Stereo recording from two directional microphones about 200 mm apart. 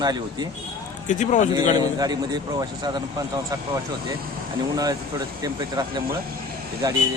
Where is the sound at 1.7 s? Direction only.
20° right (ahead or behind).